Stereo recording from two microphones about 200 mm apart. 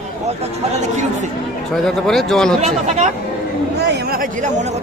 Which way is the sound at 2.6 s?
35° right (ahead or behind).